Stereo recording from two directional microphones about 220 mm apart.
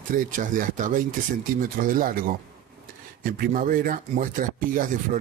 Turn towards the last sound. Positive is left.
turn(degrees=-35)  # may be behind; listen again after turning